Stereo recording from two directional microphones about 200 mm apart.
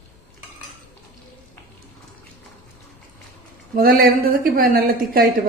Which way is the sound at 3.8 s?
50° right (ahead or behind).